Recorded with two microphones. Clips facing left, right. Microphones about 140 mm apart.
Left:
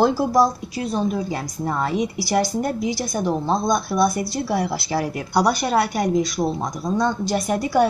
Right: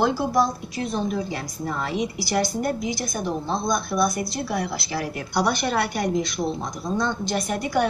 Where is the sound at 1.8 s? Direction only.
45° left (ahead or behind).